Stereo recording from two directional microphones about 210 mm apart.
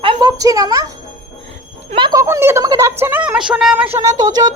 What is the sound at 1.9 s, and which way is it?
A woman's voice, 25° right (ahead or behind).